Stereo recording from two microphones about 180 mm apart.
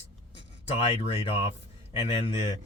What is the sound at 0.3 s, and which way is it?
Speech, 35° left (ahead or behind).